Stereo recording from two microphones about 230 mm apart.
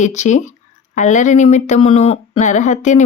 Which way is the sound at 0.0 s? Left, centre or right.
Left.